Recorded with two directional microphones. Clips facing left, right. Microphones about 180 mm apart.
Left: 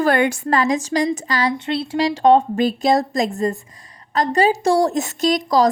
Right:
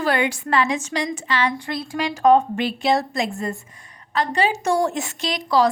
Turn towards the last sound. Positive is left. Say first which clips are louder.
# left 3 dB
turn(degrees=40)  # may be behind; listen again after turning